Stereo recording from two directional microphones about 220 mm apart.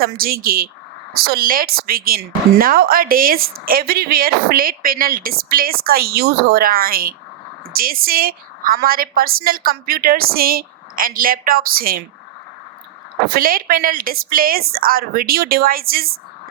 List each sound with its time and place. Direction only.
0.0 s a woman's voice: 40° right (ahead or behind)
13.2 s a woman's voice: 40° right (ahead or behind)